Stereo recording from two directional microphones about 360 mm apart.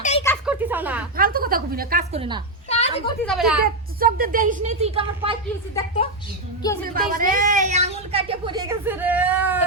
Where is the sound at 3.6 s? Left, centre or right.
Right.